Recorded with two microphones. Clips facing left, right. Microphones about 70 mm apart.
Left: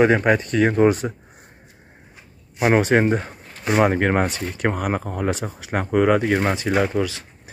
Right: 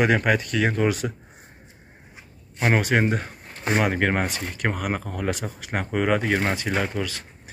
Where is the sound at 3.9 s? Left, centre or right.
Centre.